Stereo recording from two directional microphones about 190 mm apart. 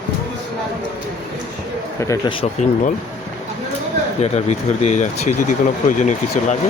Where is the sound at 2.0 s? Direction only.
15° left (ahead or behind).